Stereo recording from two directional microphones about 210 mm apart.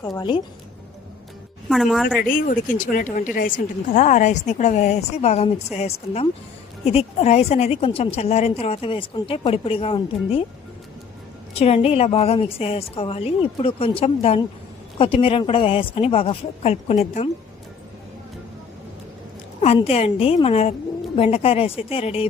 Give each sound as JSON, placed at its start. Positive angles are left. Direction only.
{"t": 0.0, "sound": "a woman's voice", "side_deg": 20}
{"t": 1.7, "sound": "a woman's voice", "side_deg": 0}
{"t": 2.2, "sound": "a woman's voice", "side_deg": 40}
{"t": 11.5, "sound": "a woman's voice", "side_deg": 30}
{"t": 19.6, "sound": "a woman's voice", "side_deg": 30}